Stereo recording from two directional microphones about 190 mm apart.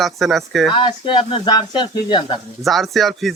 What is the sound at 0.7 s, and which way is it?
Speech, 25° left (ahead or behind).